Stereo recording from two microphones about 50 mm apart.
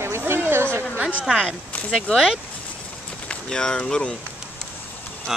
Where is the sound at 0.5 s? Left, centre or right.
Right.